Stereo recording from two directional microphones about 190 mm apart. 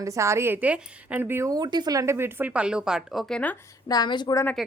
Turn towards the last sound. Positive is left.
turn(degrees=20)  # may be behind; listen again after turning